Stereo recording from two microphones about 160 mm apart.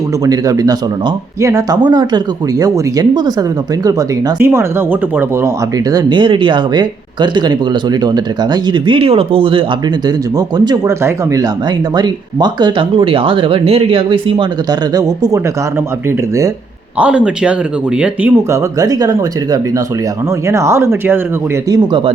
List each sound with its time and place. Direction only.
0.3 s speech: 25° right (ahead or behind)
5.7 s speech: 25° right (ahead or behind)
17.0 s speech: 5° right (ahead or behind)
18.8 s speech: 25° right (ahead or behind)
21.7 s speech: 30° right (ahead or behind)